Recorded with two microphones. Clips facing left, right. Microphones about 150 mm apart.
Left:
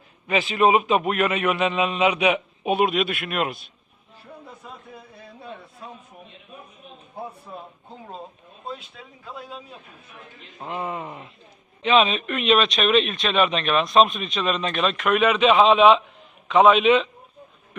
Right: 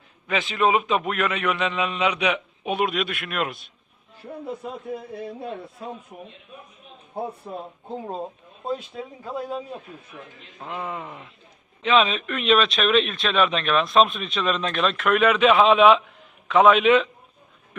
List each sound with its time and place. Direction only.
0.3 s a man's voice: 5° left (ahead or behind)
8.7 s speech: 40° right (ahead or behind)
10.6 s a man's voice: 15° left (ahead or behind)
11.8 s speech: 5° left (ahead or behind)
15.5 s speech: 5° right (ahead or behind)
16.5 s a man's voice: 15° left (ahead or behind)